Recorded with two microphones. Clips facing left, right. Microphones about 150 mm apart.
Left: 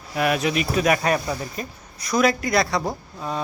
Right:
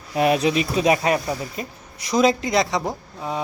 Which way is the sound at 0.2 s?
30° right (ahead or behind).